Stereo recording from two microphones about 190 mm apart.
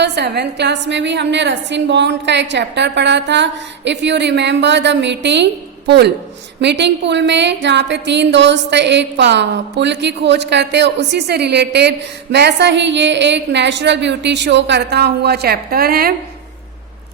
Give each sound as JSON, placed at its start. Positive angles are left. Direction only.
{"t": 0.0, "sound": "a woman's voice", "side_deg": -60}
{"t": 6.6, "sound": "a woman's voice", "side_deg": -65}